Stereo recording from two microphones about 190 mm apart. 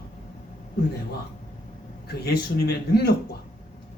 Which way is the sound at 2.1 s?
55° left (ahead or behind).